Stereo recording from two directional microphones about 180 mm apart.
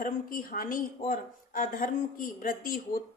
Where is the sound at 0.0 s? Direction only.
50° left (ahead or behind).